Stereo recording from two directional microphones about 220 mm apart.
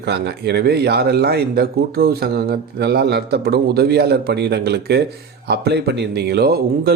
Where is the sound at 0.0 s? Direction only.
50° right (ahead or behind).